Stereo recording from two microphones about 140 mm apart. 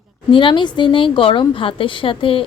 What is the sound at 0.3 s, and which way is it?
A woman's voice, 35° left (ahead or behind).